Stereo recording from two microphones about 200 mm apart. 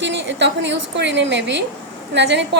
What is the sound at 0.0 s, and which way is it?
A woman's voice, 60° right (ahead or behind).